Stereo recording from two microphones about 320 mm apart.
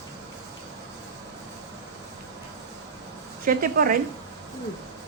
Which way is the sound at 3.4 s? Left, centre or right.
Right.